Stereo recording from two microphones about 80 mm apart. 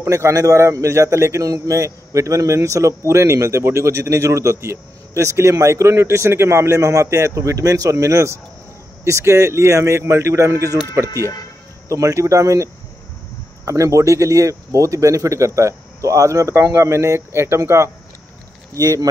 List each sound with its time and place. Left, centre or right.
0.0 s a man's voice: right
11.9 s a man's voice: right
13.7 s a man's voice: right
18.8 s speech: right